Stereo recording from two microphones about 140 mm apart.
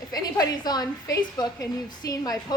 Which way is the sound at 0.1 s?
30° left (ahead or behind).